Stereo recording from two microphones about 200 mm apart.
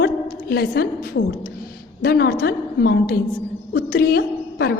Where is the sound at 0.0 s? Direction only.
50° left (ahead or behind).